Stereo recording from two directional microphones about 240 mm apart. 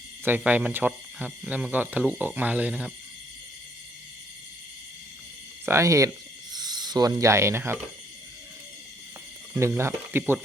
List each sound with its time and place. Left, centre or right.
0.3 s speech: centre
5.6 s speech: centre
6.5 s a sound: centre
9.6 s speech: centre